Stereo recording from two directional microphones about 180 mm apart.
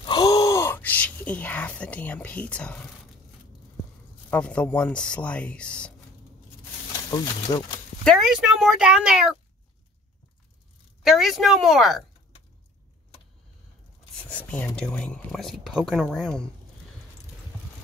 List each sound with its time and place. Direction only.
0.0 s a sound: 25° left (ahead or behind); by 2.9 s 5° left (ahead or behind)
4.3 s speech: 5° left (ahead or behind)
7.1 s speech: 20° left (ahead or behind)
8.0 s speech: centre (ahead or behind)
11.0 s speech: centre (ahead or behind)
14.3 s speech: 10° left (ahead or behind)